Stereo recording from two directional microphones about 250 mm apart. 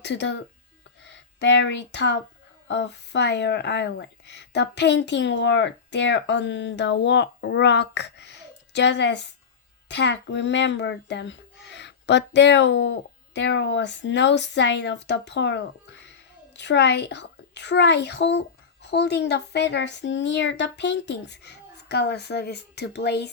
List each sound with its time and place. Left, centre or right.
0.0 s a child's voice: left